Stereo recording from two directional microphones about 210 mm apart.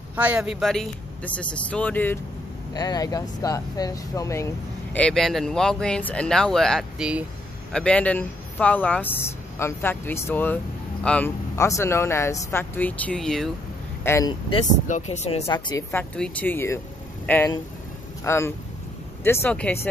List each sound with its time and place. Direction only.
0.1 s speech: 5° right (ahead or behind); by 4.5 s 15° left (ahead or behind)
4.9 s speech: 5° left (ahead or behind)
14.0 s speech: 15° left (ahead or behind)
14.5 s speech: 30° left (ahead or behind)
15.4 s speech: 15° left (ahead or behind)